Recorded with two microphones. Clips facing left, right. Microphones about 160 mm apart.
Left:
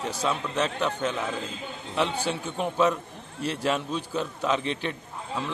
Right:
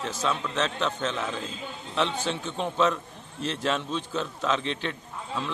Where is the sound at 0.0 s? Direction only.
15° left (ahead or behind).